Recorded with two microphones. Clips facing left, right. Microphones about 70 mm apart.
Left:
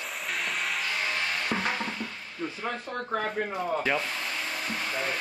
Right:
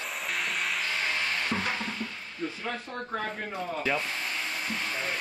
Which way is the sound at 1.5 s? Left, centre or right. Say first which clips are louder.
Left 1 dB; left.